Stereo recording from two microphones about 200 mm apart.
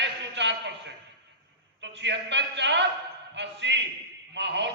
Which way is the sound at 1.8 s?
60° right (ahead or behind).